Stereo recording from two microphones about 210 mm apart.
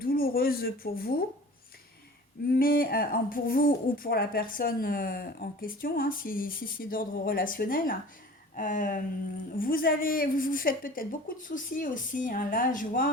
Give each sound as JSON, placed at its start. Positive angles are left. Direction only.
{"t": 0.0, "sound": "speech", "side_deg": 45}
{"t": 2.5, "sound": "a woman's voice", "side_deg": 45}